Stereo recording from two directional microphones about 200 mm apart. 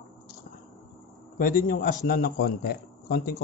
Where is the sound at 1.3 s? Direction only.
45° left (ahead or behind).